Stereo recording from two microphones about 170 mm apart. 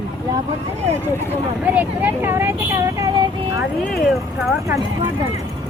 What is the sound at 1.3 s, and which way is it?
Speech, 10° right (ahead or behind).